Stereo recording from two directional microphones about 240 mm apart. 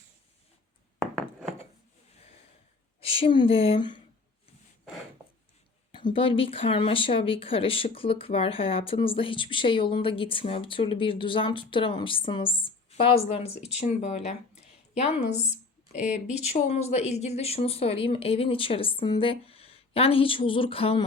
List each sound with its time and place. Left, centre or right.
3.0 s speech: left
5.9 s a woman's voice: centre
16.0 s speech: centre
16.5 s speech: left